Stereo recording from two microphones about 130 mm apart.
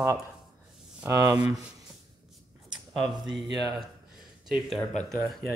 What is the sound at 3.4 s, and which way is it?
Speech, centre (ahead or behind).